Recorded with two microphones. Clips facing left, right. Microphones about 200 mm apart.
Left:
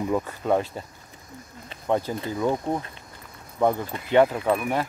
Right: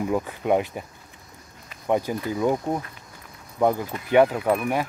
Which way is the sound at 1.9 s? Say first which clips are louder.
Right 1 dB; 15° right (ahead or behind).